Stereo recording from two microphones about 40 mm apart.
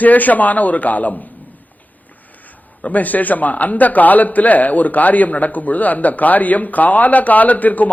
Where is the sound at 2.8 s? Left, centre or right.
Left.